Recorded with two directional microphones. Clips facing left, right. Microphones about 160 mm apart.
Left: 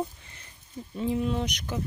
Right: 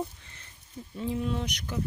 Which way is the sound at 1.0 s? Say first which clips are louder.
Left 3 dB; 20° left (ahead or behind).